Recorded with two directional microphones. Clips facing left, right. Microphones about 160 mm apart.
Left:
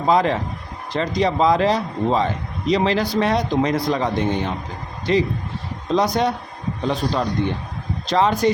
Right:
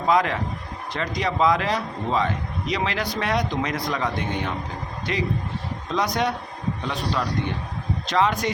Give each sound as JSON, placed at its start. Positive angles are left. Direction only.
{"t": 0.1, "sound": "a man's voice", "side_deg": 30}